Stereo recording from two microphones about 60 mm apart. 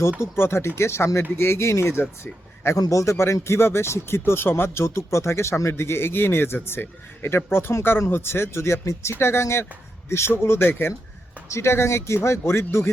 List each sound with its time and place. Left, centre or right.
0.2 s speech: left
2.7 s a man's voice: left
11.4 s speech: left